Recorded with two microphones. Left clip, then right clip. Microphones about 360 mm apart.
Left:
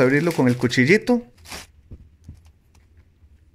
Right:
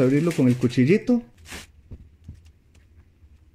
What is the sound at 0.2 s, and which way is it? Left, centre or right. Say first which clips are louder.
Speech: left 2 dB; centre.